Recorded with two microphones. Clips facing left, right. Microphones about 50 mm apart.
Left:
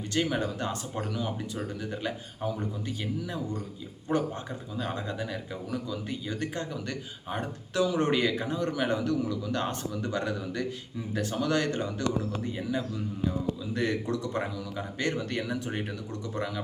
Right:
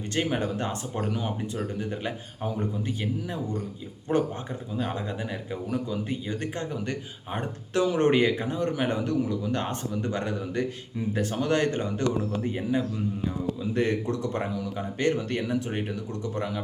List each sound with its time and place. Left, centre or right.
0.1 s a man's voice: right